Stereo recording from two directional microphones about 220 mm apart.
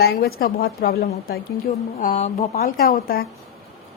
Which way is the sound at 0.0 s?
45° left (ahead or behind).